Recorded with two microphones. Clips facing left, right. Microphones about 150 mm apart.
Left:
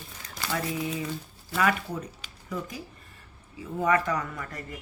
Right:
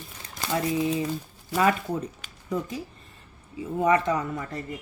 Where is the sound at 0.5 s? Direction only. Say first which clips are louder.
Right 6 dB; 25° right (ahead or behind).